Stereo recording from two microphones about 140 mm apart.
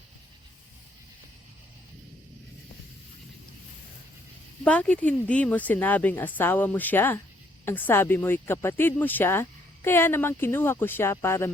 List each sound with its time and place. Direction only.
4.6 s speech: 10° left (ahead or behind)